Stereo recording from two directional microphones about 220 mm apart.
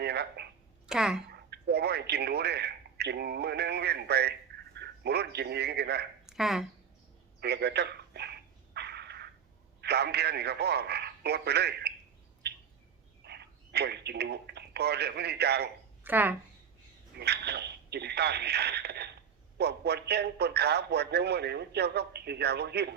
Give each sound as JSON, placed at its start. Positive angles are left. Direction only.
{"t": 0.0, "sound": "a woman's voice", "side_deg": -50}
{"t": 0.9, "sound": "speech", "side_deg": -5}
{"t": 1.3, "sound": "speech", "side_deg": -50}
{"t": 6.2, "sound": "speech", "side_deg": 0}
{"t": 7.4, "sound": "a sound", "side_deg": -50}
{"t": 9.8, "sound": "speech", "side_deg": -50}
{"t": 13.2, "sound": "speech", "side_deg": -50}
{"t": 16.0, "sound": "a woman's voice", "side_deg": -10}
{"t": 17.2, "sound": "a man's voice", "side_deg": -50}